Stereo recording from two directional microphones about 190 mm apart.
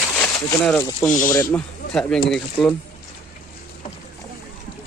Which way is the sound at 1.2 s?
10° left (ahead or behind).